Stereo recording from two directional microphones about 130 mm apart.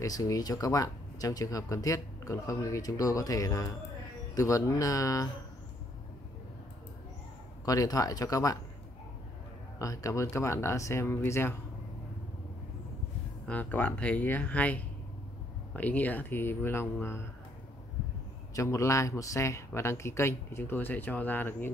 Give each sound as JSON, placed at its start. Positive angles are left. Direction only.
{"t": 0.0, "sound": "speech", "side_deg": 25}
{"t": 7.6, "sound": "speech", "side_deg": 30}
{"t": 9.8, "sound": "speech", "side_deg": 25}
{"t": 13.5, "sound": "speech", "side_deg": 15}
{"t": 18.5, "sound": "speech", "side_deg": 25}